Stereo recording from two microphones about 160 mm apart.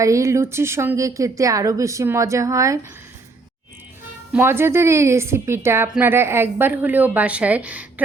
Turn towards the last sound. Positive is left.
turn(degrees=-10)  # may be behind; listen again after turning